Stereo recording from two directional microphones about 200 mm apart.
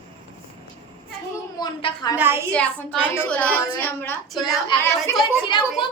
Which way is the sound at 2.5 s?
5° left (ahead or behind).